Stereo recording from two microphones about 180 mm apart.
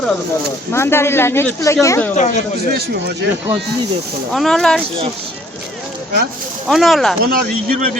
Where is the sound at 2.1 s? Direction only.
40° left (ahead or behind).